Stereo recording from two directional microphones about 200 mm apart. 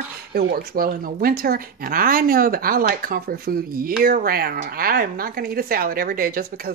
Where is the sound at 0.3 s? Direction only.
50° right (ahead or behind).